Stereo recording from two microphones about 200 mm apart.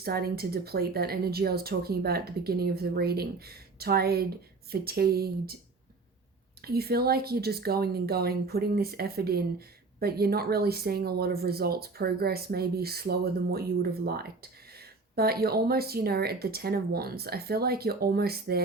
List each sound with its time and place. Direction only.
0.0 s speech: 50° right (ahead or behind)
6.6 s speech: 50° right (ahead or behind)